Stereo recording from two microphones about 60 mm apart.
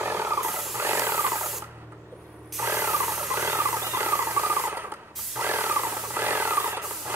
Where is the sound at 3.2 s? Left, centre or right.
Right.